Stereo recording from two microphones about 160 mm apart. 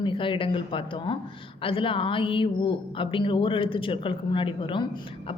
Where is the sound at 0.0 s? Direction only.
30° left (ahead or behind).